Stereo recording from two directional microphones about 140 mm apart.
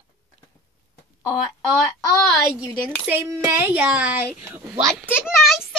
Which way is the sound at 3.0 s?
15° right (ahead or behind).